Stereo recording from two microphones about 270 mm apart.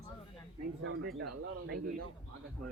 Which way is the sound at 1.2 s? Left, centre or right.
Right.